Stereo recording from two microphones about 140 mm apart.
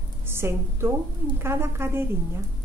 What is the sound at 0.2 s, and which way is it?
A woman's voice, 15° right (ahead or behind).